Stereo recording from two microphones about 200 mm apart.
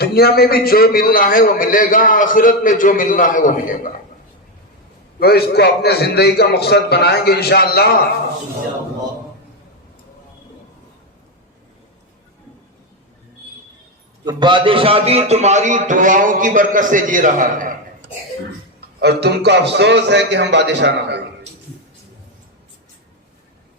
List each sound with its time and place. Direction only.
0.0 s a man's voice: 50° left (ahead or behind)
5.2 s a man's voice: 55° left (ahead or behind)
14.3 s a man's voice: 25° right (ahead or behind); by 17.7 s 40° right (ahead or behind)
18.9 s a man's voice: 55° right (ahead or behind)